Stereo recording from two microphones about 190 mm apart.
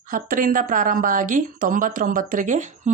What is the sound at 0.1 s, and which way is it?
Speech, 45° right (ahead or behind).